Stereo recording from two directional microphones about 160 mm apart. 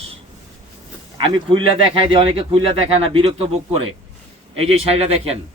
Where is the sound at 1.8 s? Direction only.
35° right (ahead or behind).